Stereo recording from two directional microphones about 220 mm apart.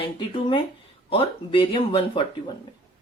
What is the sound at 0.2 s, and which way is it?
Speech, 25° left (ahead or behind).